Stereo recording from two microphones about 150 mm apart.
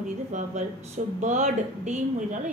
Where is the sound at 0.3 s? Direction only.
50° right (ahead or behind).